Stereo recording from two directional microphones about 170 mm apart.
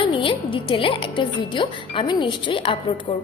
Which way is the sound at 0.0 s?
30° left (ahead or behind).